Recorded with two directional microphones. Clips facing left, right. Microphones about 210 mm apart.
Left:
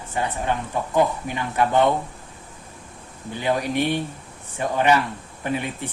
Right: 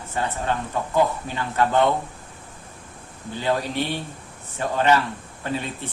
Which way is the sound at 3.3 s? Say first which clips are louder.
Left 1 dB; 15° left (ahead or behind).